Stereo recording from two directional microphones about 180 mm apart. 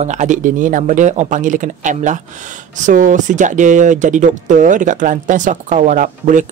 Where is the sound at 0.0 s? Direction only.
40° right (ahead or behind).